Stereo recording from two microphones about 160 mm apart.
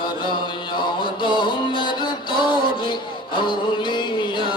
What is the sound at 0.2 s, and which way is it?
Music, 30° left (ahead or behind).